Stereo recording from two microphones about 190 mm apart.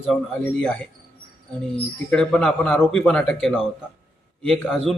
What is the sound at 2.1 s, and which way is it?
Speech, 5° left (ahead or behind).